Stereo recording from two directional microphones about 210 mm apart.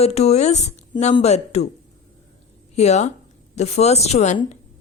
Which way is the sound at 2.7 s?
30° left (ahead or behind).